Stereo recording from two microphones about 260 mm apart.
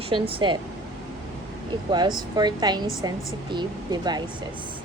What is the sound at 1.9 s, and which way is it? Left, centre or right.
A woman's voice, centre.